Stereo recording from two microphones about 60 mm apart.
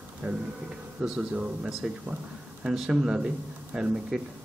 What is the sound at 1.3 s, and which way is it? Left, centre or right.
Speech, right.